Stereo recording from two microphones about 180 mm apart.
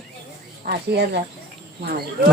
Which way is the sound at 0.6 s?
60° right (ahead or behind).